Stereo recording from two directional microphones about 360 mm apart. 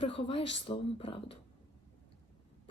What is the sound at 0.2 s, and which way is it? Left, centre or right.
Speech, centre.